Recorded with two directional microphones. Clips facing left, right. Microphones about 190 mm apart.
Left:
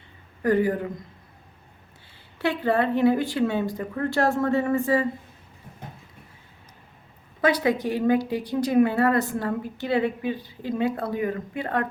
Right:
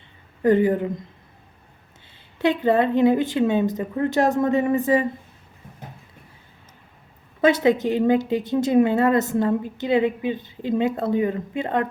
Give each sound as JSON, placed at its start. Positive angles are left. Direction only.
{"t": 0.4, "sound": "a woman's voice", "side_deg": -25}
{"t": 2.4, "sound": "a woman's voice", "side_deg": -20}
{"t": 7.4, "sound": "a woman's voice", "side_deg": -25}